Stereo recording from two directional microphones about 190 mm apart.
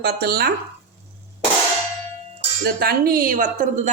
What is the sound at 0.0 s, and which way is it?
Speech, 55° right (ahead or behind).